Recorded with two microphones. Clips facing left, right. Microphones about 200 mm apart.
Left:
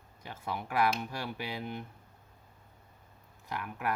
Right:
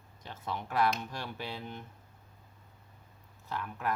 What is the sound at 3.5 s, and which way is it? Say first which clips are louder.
Speech: even; 10° left (ahead or behind).